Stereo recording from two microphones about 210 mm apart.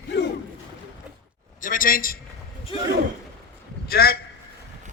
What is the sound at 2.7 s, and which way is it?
Speech, 25° left (ahead or behind).